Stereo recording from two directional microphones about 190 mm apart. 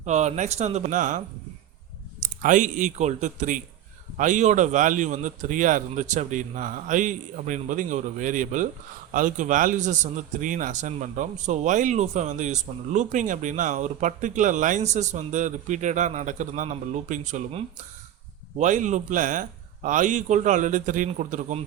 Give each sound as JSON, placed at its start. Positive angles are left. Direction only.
{"t": 0.0, "sound": "speech", "side_deg": -35}
{"t": 2.2, "sound": "a man's voice", "side_deg": -40}